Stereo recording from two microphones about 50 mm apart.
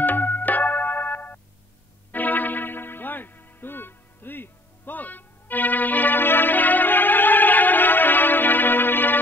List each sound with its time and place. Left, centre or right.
0.0 s keyboard: left
2.1 s music: left